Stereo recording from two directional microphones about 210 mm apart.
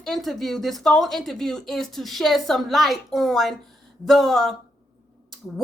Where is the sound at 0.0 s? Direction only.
Centre (ahead or behind).